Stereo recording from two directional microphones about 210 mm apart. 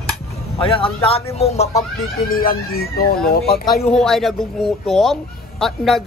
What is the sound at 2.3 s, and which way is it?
Speech, 45° left (ahead or behind).